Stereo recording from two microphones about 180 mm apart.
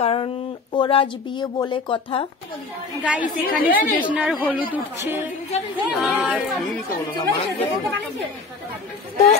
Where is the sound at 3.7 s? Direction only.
55° left (ahead or behind).